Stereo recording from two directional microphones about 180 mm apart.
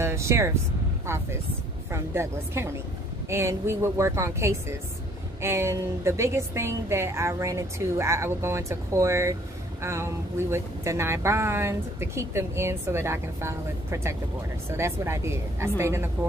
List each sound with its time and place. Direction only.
0.0 s speech: 15° right (ahead or behind)